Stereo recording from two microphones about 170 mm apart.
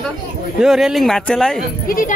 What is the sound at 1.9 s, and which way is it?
Speech, 55° left (ahead or behind).